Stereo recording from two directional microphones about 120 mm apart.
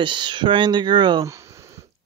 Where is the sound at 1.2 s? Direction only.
25° right (ahead or behind).